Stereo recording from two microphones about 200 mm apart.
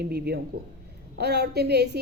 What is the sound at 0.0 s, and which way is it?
A woman's voice, 50° right (ahead or behind).